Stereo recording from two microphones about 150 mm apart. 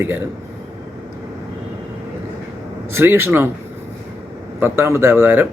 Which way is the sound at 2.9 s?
15° right (ahead or behind).